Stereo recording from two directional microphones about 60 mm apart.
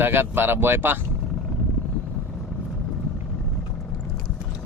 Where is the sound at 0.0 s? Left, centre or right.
Right.